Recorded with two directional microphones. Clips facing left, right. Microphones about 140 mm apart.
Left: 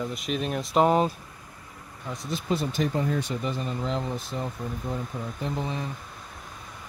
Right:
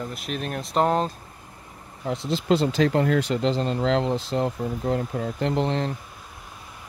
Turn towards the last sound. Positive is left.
turn(degrees=-80)